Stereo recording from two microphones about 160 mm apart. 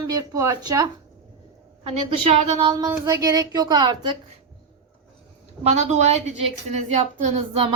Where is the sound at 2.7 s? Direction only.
25° right (ahead or behind).